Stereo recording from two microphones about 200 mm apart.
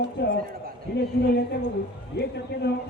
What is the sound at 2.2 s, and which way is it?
Speech, 55° left (ahead or behind).